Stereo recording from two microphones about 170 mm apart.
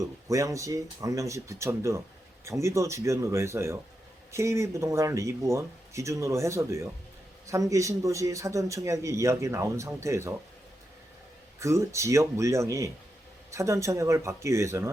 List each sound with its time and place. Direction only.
0.0 s speech: 20° right (ahead or behind)
11.6 s speech: 15° right (ahead or behind)